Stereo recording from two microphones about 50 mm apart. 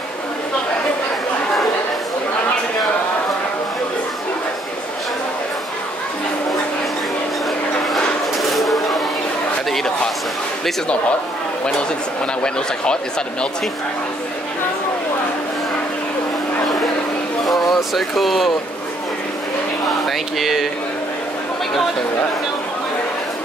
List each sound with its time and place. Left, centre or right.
7.9 s a sound: centre
12.5 s speech: centre
17.5 s speech: centre
20.1 s speech: centre